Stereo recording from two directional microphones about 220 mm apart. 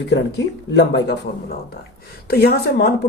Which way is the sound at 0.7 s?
50° left (ahead or behind).